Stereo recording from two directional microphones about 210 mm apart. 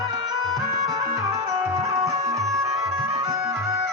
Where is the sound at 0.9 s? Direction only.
15° right (ahead or behind).